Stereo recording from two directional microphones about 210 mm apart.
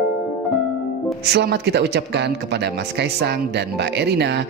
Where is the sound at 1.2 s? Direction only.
50° right (ahead or behind).